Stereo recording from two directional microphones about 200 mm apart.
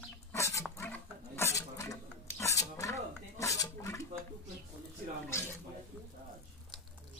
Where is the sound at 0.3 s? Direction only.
15° left (ahead or behind).